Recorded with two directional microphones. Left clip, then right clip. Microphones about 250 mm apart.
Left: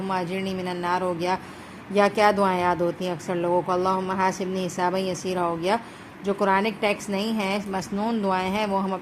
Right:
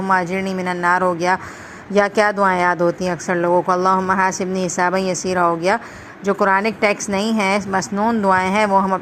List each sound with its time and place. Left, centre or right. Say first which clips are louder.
0.1 s speech: right 10 dB; centre